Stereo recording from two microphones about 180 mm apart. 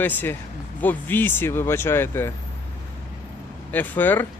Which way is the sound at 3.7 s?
10° left (ahead or behind).